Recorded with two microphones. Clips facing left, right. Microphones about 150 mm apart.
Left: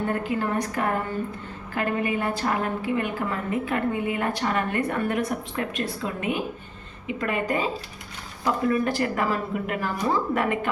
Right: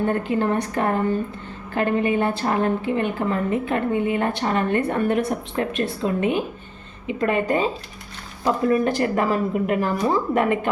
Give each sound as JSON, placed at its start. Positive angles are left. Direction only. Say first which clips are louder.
{"t": 0.1, "sound": "a woman's voice", "louder": "right 4 dB", "side_deg": -25}
{"t": 8.7, "sound": "a woman's voice", "louder": "right 4 dB", "side_deg": -20}